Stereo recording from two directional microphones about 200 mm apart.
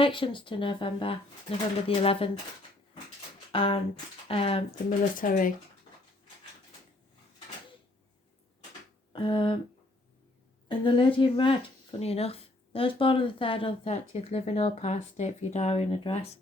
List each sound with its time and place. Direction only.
0.0 s speech: 25° left (ahead or behind)
3.5 s speech: 25° left (ahead or behind)
4.9 s speech: 45° left (ahead or behind)
9.1 s speech: 25° left (ahead or behind)
10.7 s speech: 25° left (ahead or behind)